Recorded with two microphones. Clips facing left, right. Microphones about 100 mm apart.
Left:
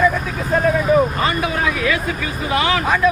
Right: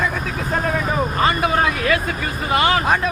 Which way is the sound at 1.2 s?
50° right (ahead or behind).